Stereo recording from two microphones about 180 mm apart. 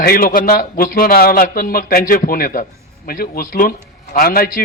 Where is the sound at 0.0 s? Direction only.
55° left (ahead or behind).